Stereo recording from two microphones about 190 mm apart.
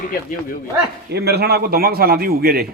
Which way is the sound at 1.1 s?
60° right (ahead or behind).